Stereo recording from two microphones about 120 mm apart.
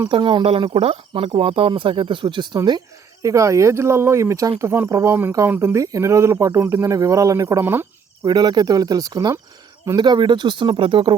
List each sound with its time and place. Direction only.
0.1 s speech: 45° right (ahead or behind)
3.2 s speech: 25° right (ahead or behind)
4.7 s speech: 15° right (ahead or behind)
8.2 s speech: 35° right (ahead or behind)